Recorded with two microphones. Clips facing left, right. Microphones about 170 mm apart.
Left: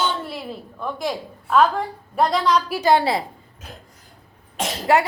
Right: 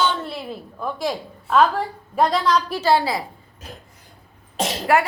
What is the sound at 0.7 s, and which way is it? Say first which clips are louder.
A woman's voice: right 1 dB; centre (ahead or behind).